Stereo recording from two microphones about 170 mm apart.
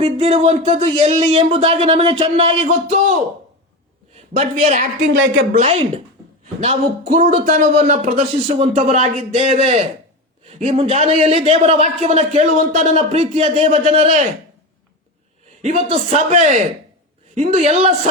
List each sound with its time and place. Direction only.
0.0 s a man's voice: 35° right (ahead or behind)
4.1 s a man's voice: 40° right (ahead or behind)
15.6 s speech: 40° right (ahead or behind)